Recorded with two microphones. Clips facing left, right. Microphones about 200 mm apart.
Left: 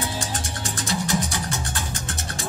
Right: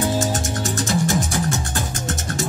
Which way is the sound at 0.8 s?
45° right (ahead or behind).